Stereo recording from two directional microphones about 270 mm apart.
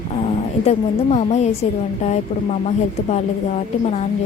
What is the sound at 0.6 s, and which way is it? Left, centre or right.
A woman's voice, left.